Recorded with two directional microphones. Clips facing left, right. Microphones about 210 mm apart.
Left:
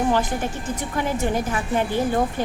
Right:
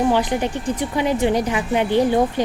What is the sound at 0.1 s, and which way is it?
A woman's voice, 15° right (ahead or behind).